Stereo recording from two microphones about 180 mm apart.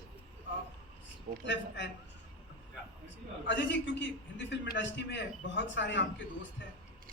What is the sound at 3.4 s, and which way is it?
A man's voice, 85° left.